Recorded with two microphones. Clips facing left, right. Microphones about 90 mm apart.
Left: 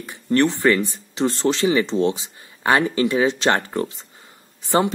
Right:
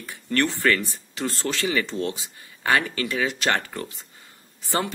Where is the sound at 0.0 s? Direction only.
20° left (ahead or behind).